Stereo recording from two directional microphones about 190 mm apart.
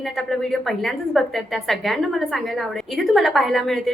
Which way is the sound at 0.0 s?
Centre (ahead or behind).